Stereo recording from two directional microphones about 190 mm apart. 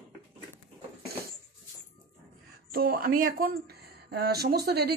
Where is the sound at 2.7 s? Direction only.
50° right (ahead or behind).